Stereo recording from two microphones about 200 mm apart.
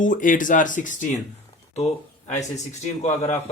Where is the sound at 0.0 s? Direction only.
40° left (ahead or behind).